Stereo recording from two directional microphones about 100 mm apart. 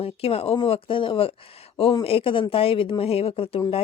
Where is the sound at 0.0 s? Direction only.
75° left (ahead or behind).